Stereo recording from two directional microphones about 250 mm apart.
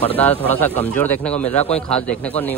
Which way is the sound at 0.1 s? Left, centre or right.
Centre.